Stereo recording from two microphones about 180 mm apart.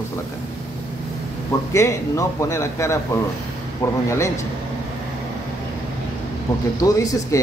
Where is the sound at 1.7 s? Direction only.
15° left (ahead or behind).